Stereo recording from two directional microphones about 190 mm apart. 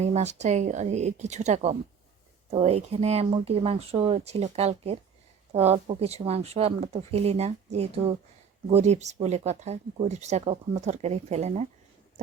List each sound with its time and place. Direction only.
0.0 s speech: 35° right (ahead or behind)